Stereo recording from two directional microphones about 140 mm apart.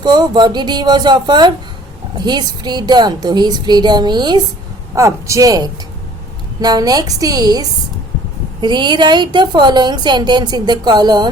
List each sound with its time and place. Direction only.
0.0 s a woman's voice: 30° right (ahead or behind)